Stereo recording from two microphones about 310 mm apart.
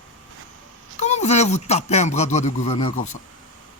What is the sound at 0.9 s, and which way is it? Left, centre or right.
Speech, left.